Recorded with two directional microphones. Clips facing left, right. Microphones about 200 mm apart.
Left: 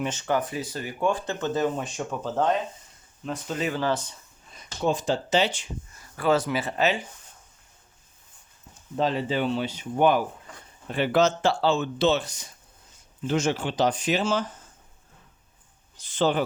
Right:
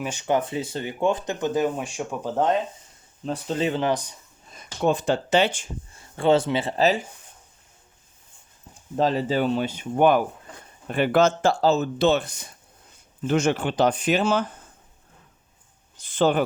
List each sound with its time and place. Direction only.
0.0 s speech: 15° right (ahead or behind)
3.2 s speech: 30° right (ahead or behind); by 4.2 s 15° right (ahead or behind)
4.5 s speech: 60° right (ahead or behind)
5.9 s speech: 25° right (ahead or behind)
9.0 s speech: 40° right (ahead or behind); by 14.4 s 55° right (ahead or behind)
16.0 s speech: 55° right (ahead or behind)